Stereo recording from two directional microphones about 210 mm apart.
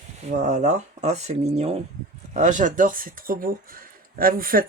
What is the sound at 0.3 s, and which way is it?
Speech, 35° right (ahead or behind).